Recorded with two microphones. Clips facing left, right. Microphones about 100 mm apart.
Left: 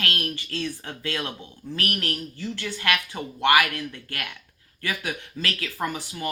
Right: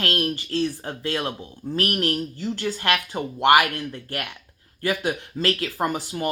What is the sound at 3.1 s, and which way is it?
Speech, 40° right (ahead or behind).